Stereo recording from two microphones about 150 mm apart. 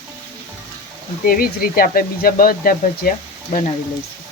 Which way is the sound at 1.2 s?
75° left (ahead or behind).